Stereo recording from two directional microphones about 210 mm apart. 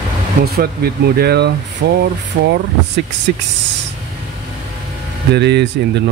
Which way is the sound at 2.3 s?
45° right (ahead or behind).